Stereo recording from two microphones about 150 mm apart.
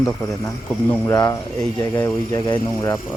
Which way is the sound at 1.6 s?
10° left (ahead or behind).